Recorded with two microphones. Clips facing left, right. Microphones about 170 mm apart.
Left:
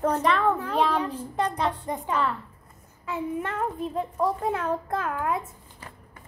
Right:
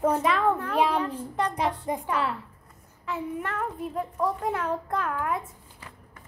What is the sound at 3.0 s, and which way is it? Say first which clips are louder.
A child's voice: left 2 dB; 25° left (ahead or behind).